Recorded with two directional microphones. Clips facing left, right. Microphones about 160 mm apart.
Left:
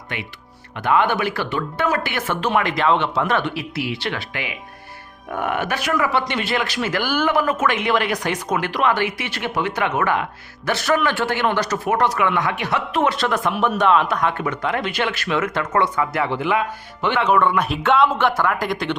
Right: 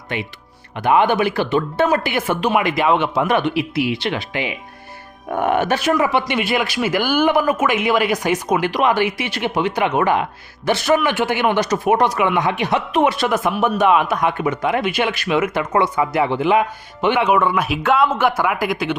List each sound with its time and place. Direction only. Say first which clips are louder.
0.8 s speech: right 3 dB; 15° right (ahead or behind)